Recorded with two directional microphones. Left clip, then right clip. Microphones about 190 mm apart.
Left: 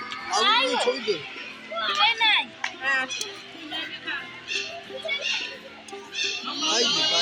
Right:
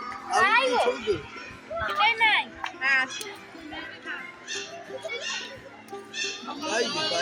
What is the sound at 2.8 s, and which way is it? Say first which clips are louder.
Speech: right 2 dB; 20° left (ahead or behind).